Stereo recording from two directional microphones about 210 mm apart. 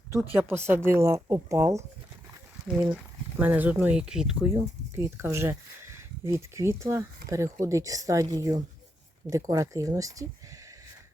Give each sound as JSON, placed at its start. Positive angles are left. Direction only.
{"t": 0.3, "sound": "speech", "side_deg": -10}
{"t": 2.9, "sound": "speech", "side_deg": -10}